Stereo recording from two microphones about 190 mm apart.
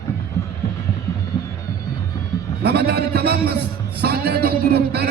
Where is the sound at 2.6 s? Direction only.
60° right (ahead or behind).